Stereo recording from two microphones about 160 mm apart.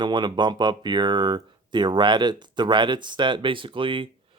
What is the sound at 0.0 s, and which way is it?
Speech, 30° right (ahead or behind).